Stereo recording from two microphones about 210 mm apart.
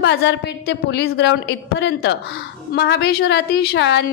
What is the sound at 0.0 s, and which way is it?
A woman's voice, 50° left (ahead or behind).